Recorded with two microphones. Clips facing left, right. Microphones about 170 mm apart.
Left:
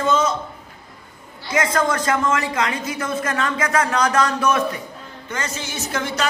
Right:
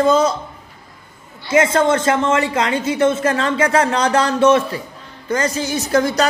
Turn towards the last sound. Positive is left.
turn(degrees=-40)  # may be behind; listen again after turning